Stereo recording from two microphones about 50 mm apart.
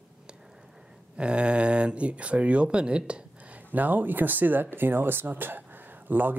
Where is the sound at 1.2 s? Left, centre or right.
Right.